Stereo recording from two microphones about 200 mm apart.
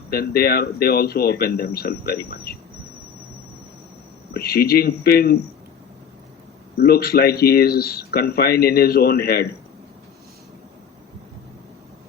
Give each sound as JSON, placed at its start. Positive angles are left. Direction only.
{"t": 0.1, "sound": "speech", "side_deg": 50}
{"t": 4.4, "sound": "speech", "side_deg": 50}
{"t": 6.7, "sound": "speech", "side_deg": 50}